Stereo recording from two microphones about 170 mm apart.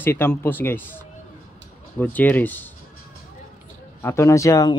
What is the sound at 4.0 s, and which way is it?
Speech, 15° left (ahead or behind).